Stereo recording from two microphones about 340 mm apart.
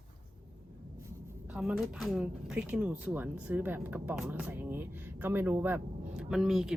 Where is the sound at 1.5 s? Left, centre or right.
Centre.